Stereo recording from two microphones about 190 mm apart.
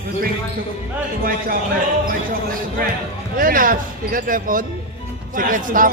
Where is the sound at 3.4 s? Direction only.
50° right (ahead or behind).